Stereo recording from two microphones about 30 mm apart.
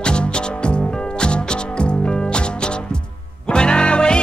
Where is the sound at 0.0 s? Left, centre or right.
Left.